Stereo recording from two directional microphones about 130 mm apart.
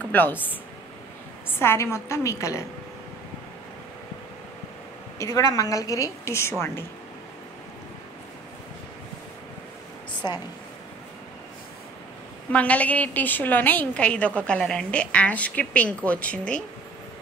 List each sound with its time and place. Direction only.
0.0 s speech: 15° left (ahead or behind)
1.6 s a woman's voice: 20° left (ahead or behind)
5.2 s a woman's voice: 25° left (ahead or behind)
12.4 s a woman's voice: 10° left (ahead or behind)